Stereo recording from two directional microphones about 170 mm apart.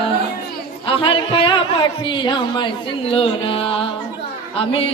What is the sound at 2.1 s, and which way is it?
Speech, 25° left (ahead or behind).